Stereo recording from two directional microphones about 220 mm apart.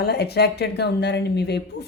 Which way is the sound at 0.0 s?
45° left (ahead or behind).